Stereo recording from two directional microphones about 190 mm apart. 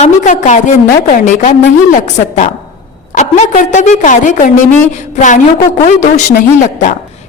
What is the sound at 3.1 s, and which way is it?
A woman's voice, 40° left (ahead or behind).